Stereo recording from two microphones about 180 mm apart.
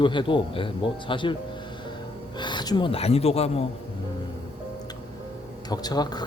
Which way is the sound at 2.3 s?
25° left (ahead or behind).